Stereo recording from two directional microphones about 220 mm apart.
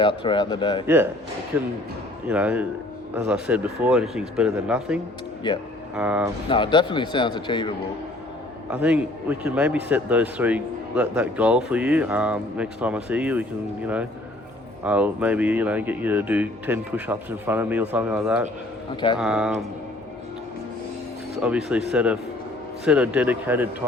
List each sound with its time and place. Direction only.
0.0 s speech: 20° left (ahead or behind)
1.5 s speech: 10° right (ahead or behind)
5.5 s speech: 20° left (ahead or behind)
6.0 s speech: 5° right (ahead or behind)
6.5 s speech: 20° left (ahead or behind)
8.7 s speech: 5° right (ahead or behind)
18.9 s speech: 20° left (ahead or behind)
19.2 s speech: 5° right (ahead or behind)
21.4 s speech: 5° right (ahead or behind)